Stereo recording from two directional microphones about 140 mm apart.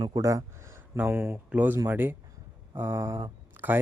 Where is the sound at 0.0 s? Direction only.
25° right (ahead or behind).